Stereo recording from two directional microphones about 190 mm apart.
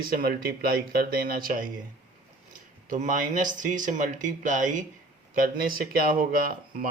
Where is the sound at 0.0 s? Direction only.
50° right (ahead or behind).